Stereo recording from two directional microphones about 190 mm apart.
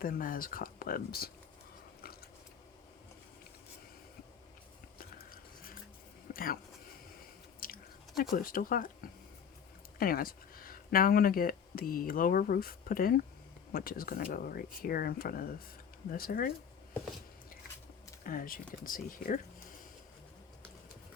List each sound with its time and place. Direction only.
0.0 s speech: 50° left (ahead or behind)
4.9 s a sound: 50° left (ahead or behind)
6.3 s speech: 50° left (ahead or behind)
7.6 s chewing: 50° left (ahead or behind)
8.2 s speech: 45° left (ahead or behind)
10.0 s speech: 50° left (ahead or behind)
18.2 s speech: 45° left (ahead or behind)